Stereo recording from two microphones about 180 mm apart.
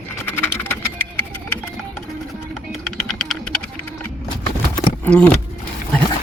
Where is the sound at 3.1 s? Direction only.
Centre (ahead or behind).